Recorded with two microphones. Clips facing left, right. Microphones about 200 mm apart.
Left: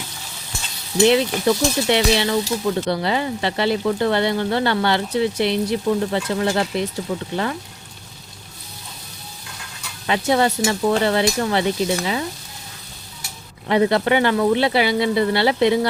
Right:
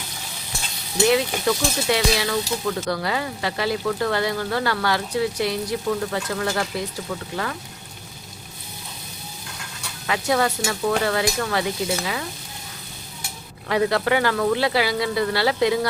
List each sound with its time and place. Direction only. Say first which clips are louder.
1.0 s speech: left 3 dB; 25° left (ahead or behind)
10.1 s speech: left 3 dB; 25° left (ahead or behind)
13.7 s speech: left 3 dB; 20° left (ahead or behind)